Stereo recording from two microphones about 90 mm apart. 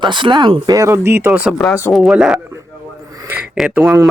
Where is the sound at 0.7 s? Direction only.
35° right (ahead or behind).